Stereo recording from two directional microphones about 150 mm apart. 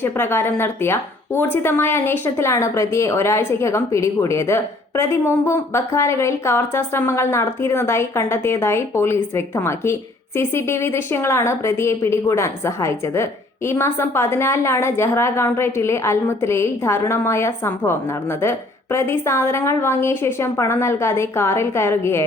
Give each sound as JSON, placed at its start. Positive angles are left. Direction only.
{"t": 0.0, "sound": "speech", "side_deg": 15}